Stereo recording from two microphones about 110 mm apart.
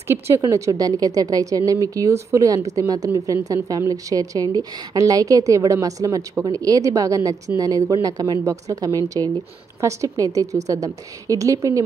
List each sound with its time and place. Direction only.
0.1 s speech: 25° right (ahead or behind)